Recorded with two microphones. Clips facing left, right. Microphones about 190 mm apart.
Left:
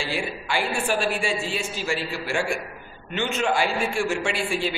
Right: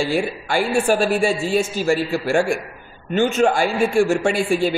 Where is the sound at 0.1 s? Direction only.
45° right (ahead or behind).